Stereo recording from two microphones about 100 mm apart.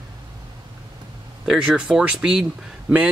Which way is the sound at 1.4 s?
5° right (ahead or behind).